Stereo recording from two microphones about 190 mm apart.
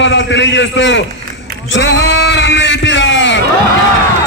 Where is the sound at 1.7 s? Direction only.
75° left (ahead or behind).